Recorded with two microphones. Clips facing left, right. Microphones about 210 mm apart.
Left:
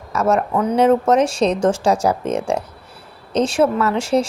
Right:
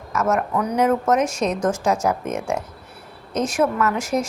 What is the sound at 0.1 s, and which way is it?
A woman's voice, 30° left (ahead or behind).